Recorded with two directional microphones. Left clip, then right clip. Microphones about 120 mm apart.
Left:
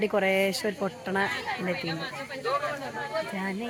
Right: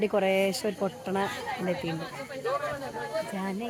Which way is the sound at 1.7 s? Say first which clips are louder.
Left 1 dB; 40° right (ahead or behind).